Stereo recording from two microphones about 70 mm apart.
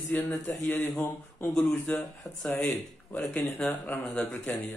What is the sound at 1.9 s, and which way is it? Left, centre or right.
Speech, centre.